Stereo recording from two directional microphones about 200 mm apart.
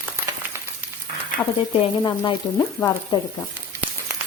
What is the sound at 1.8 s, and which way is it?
Speech, 25° left (ahead or behind).